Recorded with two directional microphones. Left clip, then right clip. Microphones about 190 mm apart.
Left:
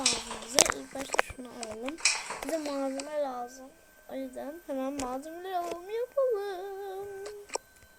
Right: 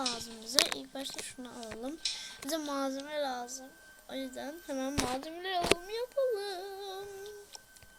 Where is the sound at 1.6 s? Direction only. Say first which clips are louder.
Left 4 dB; 10° left (ahead or behind).